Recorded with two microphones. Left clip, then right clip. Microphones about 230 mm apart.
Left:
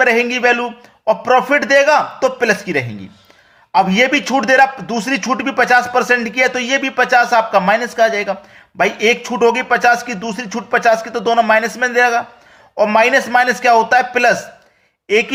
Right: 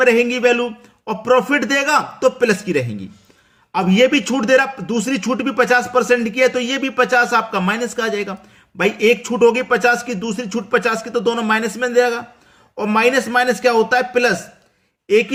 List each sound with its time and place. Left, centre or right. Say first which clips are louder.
0.0 s a man's voice: left 1 dB; centre